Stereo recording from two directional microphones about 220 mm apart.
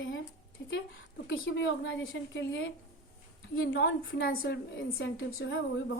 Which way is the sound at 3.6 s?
45° left (ahead or behind).